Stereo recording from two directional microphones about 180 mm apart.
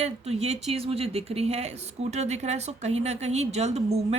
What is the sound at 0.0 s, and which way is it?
A woman's voice, 35° right (ahead or behind).